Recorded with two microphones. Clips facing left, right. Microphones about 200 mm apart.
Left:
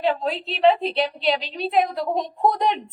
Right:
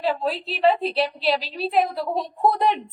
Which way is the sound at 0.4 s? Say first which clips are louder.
Left 2 dB; 5° right (ahead or behind).